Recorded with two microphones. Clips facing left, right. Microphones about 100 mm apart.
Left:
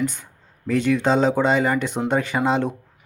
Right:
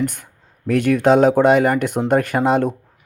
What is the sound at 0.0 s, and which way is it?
Speech, 55° right (ahead or behind).